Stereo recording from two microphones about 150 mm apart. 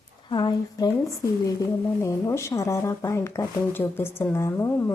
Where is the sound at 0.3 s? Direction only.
30° left (ahead or behind).